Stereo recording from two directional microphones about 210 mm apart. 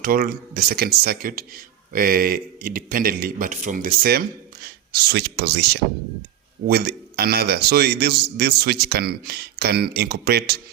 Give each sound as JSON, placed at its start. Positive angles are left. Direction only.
{"t": 0.0, "sound": "speech", "side_deg": -45}